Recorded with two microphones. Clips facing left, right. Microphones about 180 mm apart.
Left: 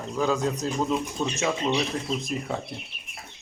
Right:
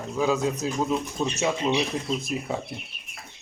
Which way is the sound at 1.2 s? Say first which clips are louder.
Right 2 dB; 15° right (ahead or behind).